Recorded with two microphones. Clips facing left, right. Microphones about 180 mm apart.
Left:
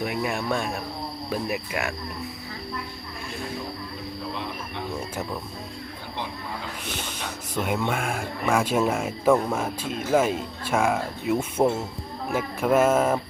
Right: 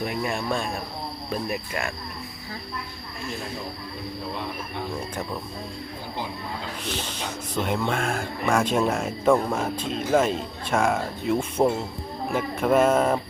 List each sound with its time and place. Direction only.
0.0 s speech: 5° left (ahead or behind)
7.5 s speech: 10° left (ahead or behind)